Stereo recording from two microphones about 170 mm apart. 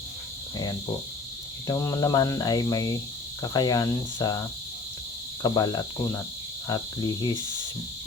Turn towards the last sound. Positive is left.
turn(degrees=25)  # may be behind; listen again after turning